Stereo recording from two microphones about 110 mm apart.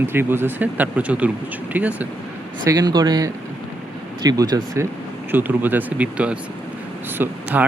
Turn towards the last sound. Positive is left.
turn(degrees=-15)  # may be behind; listen again after turning